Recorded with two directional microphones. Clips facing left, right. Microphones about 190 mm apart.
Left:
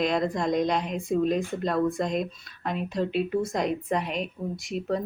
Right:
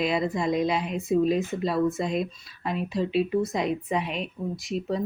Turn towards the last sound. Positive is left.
turn(degrees=0)  # may be behind; listen again after turning